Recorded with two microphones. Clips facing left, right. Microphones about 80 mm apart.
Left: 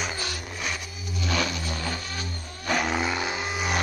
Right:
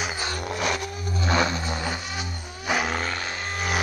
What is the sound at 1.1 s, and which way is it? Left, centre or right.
Vehicle, right.